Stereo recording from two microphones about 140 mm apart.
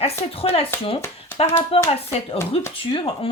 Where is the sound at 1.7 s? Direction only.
45° left (ahead or behind).